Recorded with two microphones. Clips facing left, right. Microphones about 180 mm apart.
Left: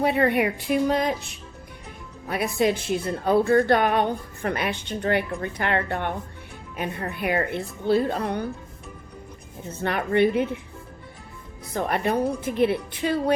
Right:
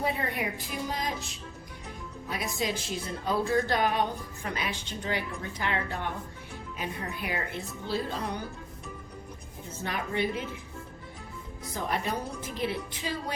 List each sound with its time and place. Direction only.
0.0 s a woman's voice: 70° left (ahead or behind)
2.2 s speech: 60° left (ahead or behind)
9.8 s speech: 60° left (ahead or behind)
11.7 s speech: 60° left (ahead or behind)